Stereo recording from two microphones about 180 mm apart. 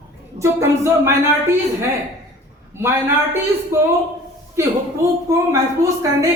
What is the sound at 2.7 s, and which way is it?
A woman's voice, 15° right (ahead or behind).